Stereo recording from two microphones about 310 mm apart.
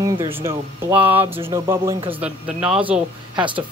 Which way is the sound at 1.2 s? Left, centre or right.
Centre.